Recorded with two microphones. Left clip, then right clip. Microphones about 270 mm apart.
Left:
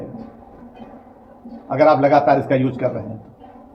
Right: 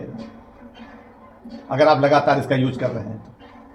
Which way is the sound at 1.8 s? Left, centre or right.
Centre.